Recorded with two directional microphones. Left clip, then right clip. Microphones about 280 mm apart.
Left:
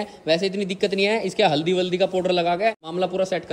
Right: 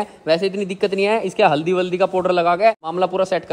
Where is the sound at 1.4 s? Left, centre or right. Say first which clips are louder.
Right 4 dB; centre.